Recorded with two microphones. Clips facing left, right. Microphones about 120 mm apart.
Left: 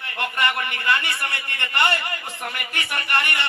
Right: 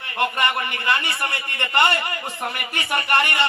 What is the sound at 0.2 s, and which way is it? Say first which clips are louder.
A man's voice: right 3 dB; 20° right (ahead or behind).